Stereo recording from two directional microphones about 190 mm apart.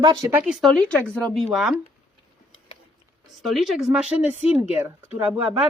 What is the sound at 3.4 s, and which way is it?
Speech, centre (ahead or behind).